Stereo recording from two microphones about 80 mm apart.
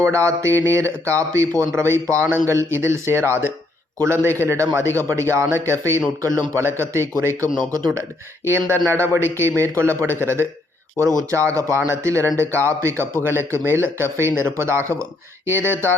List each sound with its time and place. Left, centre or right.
0.0 s speech: right
8.4 s speech: right